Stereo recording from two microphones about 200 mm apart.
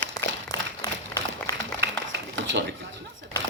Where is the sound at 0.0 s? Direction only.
10° left (ahead or behind).